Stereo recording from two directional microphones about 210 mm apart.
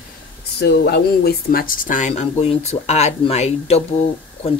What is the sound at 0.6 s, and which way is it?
Speech, 50° left (ahead or behind).